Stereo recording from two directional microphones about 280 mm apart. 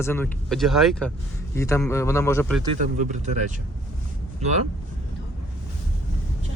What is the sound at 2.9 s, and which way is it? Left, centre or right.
Speech, right.